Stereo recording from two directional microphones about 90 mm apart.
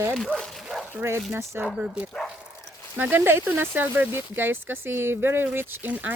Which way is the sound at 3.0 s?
25° right (ahead or behind).